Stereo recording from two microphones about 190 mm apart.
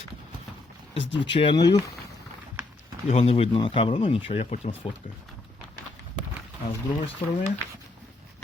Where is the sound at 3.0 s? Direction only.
30° left (ahead or behind).